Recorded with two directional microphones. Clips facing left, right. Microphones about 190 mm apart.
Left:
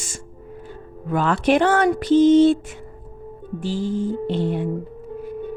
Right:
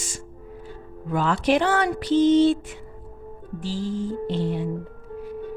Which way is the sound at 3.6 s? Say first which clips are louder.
Left 4 dB; 55° left (ahead or behind).